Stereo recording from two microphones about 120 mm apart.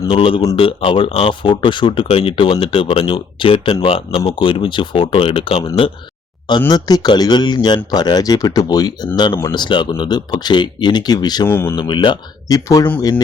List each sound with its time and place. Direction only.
0.1 s speech: 45° left (ahead or behind)
6.7 s speech: 35° left (ahead or behind)
11.4 s speech: 20° left (ahead or behind)
11.8 s speech: 40° left (ahead or behind)
12.5 s speech: 30° left (ahead or behind)